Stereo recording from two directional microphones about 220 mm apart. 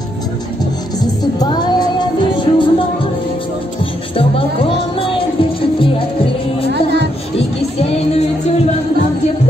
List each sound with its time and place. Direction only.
1.4 s music: 20° left (ahead or behind)
5.0 s music: 25° left (ahead or behind)
6.7 s music: 50° right (ahead or behind)
7.8 s a sound: 30° left (ahead or behind)